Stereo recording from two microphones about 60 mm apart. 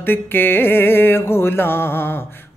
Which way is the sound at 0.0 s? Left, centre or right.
Left.